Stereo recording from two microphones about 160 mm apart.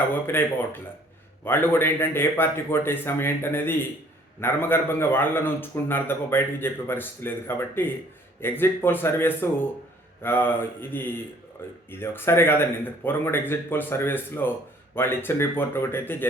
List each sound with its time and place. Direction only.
0.3 s a man's voice: 15° left (ahead or behind)